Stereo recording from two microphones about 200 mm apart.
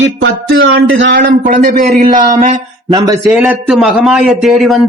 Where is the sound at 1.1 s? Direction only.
45° right (ahead or behind).